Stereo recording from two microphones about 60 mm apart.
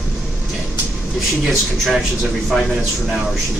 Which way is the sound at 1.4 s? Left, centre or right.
Centre.